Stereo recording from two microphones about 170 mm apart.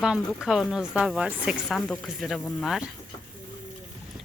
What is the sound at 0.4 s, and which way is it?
A woman's voice, centre (ahead or behind).